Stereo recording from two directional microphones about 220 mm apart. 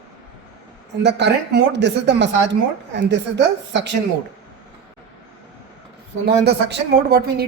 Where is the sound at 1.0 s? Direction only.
50° right (ahead or behind).